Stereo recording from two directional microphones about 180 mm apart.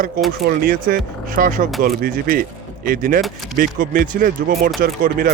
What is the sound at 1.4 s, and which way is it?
Speech, 45° right (ahead or behind).